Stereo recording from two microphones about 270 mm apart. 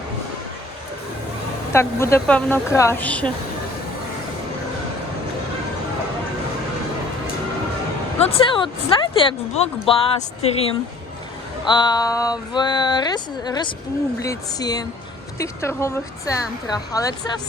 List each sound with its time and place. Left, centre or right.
1.7 s speech: centre
8.3 s speech: centre